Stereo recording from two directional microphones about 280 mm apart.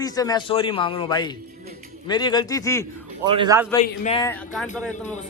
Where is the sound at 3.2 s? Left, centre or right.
Centre.